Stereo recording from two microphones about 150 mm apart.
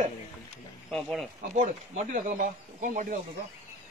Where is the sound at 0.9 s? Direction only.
Centre (ahead or behind).